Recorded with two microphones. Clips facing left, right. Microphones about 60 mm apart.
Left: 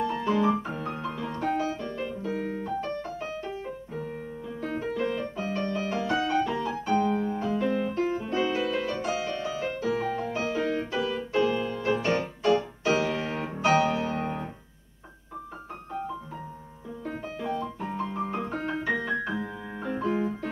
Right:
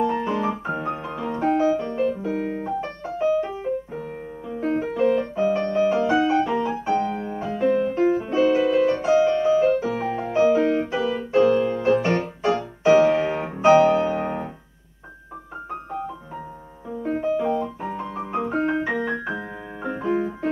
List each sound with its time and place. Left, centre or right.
0.1 s music: right
1.8 s piano: right
4.6 s music: right
11.3 s music: right
12.8 s music: centre
17.0 s piano: right
18.5 s music: right